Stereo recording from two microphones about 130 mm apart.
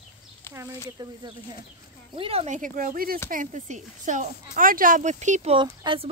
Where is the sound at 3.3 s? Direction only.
80° right.